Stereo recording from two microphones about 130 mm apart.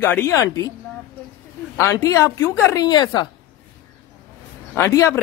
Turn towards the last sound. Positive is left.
turn(degrees=20)  # may be behind; listen again after turning